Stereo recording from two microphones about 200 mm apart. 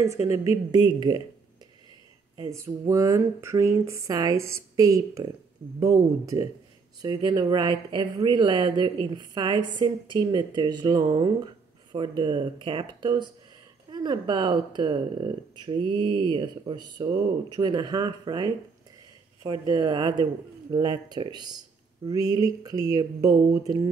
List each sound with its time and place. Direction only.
0.0 s speech: 15° right (ahead or behind)
2.3 s speech: 15° right (ahead or behind)